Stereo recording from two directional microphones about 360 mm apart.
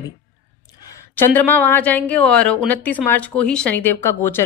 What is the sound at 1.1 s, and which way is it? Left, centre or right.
Speech, centre.